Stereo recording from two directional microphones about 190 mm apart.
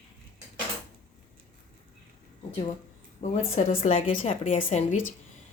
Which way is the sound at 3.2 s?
35° left (ahead or behind).